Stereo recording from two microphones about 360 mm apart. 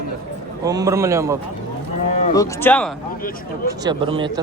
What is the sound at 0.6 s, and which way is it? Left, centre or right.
Speech, centre.